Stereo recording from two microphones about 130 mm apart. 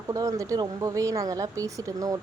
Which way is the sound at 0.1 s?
25° right (ahead or behind).